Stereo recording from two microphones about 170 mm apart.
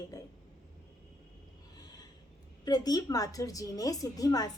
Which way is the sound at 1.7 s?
25° left (ahead or behind).